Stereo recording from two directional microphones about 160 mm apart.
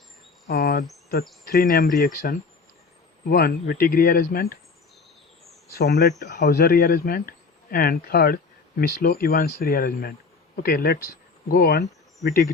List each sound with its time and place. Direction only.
0.4 s cricket: 75° left (ahead or behind)
1.5 s speech: 65° left (ahead or behind)
5.7 s speech: 85° left